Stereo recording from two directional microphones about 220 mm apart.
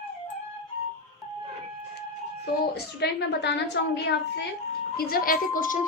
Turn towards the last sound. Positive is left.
turn(degrees=35)  # may be behind; listen again after turning